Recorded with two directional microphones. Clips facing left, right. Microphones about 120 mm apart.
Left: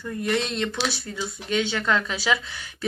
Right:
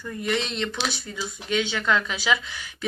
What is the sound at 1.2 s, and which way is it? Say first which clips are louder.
Speech: left 1 dB; 40° left (ahead or behind).